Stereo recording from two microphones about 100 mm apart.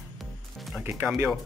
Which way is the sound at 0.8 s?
20° right (ahead or behind).